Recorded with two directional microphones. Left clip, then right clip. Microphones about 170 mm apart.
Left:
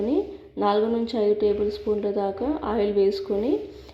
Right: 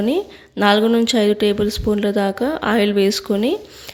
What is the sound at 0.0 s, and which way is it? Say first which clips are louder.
Speech: right 5 dB; 30° right (ahead or behind).